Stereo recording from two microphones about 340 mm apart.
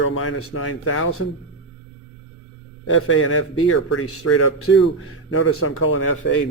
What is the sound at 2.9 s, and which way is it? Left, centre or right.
A man's voice, left.